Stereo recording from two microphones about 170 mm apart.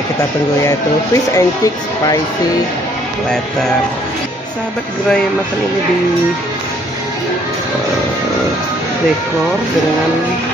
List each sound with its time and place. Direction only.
0.7 s speech: 20° left (ahead or behind)